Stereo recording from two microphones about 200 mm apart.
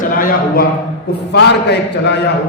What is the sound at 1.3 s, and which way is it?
Speech, 55° left (ahead or behind).